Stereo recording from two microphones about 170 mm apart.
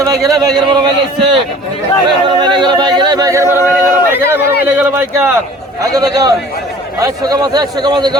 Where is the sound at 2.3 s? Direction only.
25° right (ahead or behind); by 4.4 s 10° right (ahead or behind).